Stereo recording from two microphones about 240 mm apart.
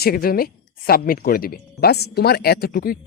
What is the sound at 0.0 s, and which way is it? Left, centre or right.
A woman's voice, left.